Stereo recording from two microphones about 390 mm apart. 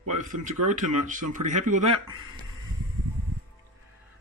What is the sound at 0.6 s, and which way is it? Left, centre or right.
Speech, centre.